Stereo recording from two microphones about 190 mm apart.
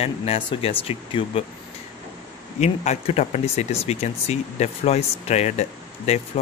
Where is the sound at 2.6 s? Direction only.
35° left (ahead or behind).